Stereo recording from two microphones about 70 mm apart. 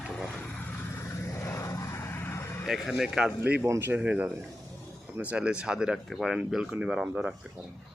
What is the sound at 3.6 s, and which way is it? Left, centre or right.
Speech, right.